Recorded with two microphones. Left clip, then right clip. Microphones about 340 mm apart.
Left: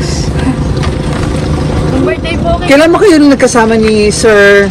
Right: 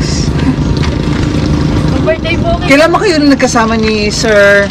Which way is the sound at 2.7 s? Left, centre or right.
Right.